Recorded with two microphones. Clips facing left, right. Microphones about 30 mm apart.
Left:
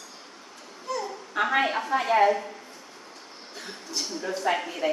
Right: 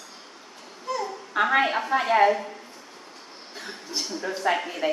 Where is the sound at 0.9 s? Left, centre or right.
Centre.